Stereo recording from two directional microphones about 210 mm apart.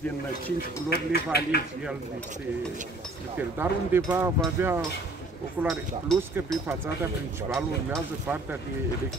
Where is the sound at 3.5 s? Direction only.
10° right (ahead or behind).